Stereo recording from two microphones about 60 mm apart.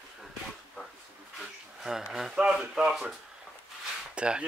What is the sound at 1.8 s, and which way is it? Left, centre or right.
Speech, centre.